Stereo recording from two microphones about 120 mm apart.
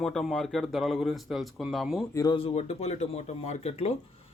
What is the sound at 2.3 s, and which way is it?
Speech, 55° left (ahead or behind).